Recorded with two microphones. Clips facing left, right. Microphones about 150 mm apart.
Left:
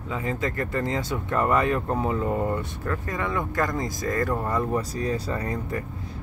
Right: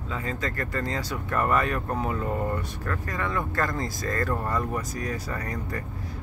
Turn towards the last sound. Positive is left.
turn(degrees=25)  # may be behind; listen again after turning